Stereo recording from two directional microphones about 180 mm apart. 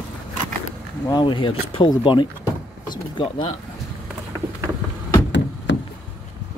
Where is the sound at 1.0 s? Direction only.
25° left (ahead or behind).